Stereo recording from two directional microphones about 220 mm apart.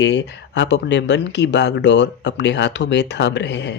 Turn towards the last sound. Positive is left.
turn(degrees=55)  # may be behind; listen again after turning